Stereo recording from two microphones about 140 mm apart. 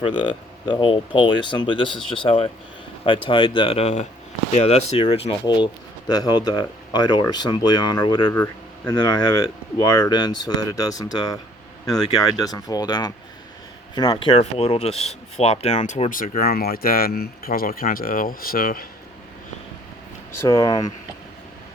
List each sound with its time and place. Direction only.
0.0 s speech: 35° left (ahead or behind)
8.3 s speech: 20° left (ahead or behind)
9.0 s speech: 30° left (ahead or behind); by 18.9 s 90° left
20.4 s speech: 25° left (ahead or behind)